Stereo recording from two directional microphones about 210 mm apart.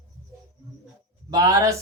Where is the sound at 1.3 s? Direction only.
20° right (ahead or behind).